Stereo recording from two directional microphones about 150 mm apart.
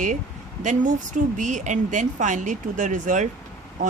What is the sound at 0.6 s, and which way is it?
Speech, 55° right (ahead or behind).